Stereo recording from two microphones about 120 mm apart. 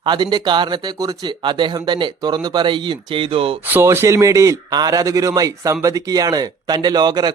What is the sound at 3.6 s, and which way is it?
Speech, 20° right (ahead or behind).